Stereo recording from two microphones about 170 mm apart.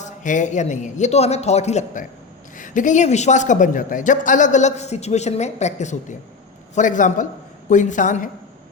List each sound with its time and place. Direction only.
0.0 s a man's voice: 45° left (ahead or behind)